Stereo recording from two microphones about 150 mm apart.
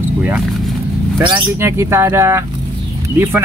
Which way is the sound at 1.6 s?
15° right (ahead or behind).